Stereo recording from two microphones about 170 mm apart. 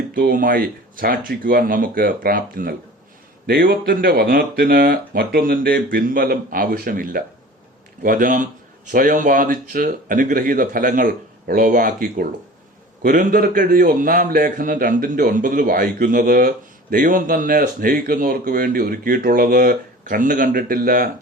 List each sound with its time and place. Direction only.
0.1 s a man's voice: 55° right (ahead or behind)